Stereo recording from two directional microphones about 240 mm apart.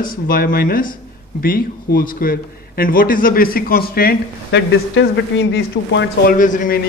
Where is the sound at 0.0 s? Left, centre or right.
Left.